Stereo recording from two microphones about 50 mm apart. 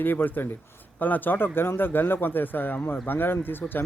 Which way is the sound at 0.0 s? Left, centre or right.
Left.